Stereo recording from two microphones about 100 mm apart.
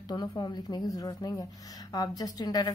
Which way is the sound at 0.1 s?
45° left (ahead or behind).